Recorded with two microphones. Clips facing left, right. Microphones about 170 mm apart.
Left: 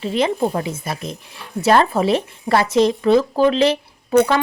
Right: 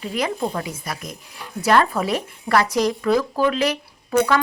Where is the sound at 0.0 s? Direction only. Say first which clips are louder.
Left 5 dB; 25° left (ahead or behind).